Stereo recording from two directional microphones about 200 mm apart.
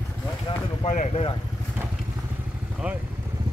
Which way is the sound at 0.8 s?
35° left (ahead or behind).